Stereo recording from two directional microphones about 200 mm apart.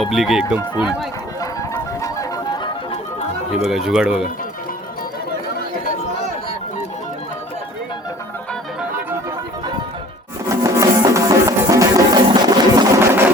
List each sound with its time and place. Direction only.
0.0 s speech: centre (ahead or behind)
1.4 s fowl: 15° left (ahead or behind)
2.9 s music: 30° left (ahead or behind)
3.6 s speech: centre (ahead or behind)
10.5 s music: 15° right (ahead or behind)